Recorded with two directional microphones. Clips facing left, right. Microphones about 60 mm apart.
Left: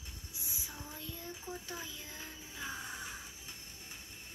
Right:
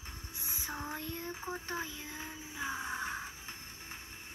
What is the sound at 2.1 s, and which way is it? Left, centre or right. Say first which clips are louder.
Music: right 4 dB; right.